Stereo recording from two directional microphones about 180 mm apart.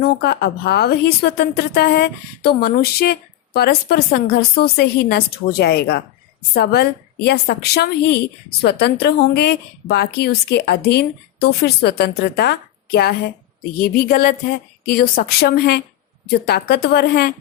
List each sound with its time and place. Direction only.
0.0 s a woman's voice: 60° left (ahead or behind)